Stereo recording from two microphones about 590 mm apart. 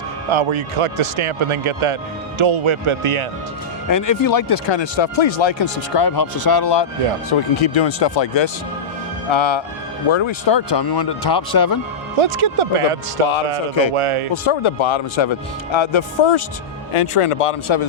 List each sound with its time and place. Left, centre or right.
0.3 s speech: right
3.8 s speech: left
7.3 s speech: left
12.2 s speech: right
14.4 s speech: left